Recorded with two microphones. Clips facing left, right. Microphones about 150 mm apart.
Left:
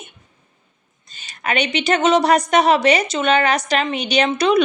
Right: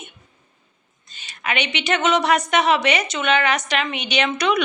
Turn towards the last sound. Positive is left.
turn(degrees=30)  # may be behind; listen again after turning